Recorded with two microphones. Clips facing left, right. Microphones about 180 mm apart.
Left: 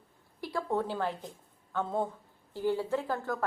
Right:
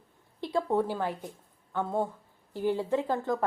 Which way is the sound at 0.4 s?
15° right (ahead or behind).